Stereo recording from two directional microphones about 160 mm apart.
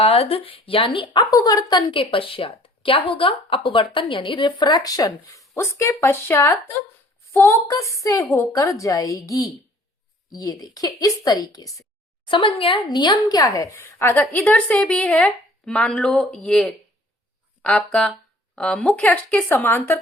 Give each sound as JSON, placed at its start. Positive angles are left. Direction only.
{"t": 0.0, "sound": "a woman's voice", "side_deg": 40}
{"t": 12.3, "sound": "a woman's voice", "side_deg": 35}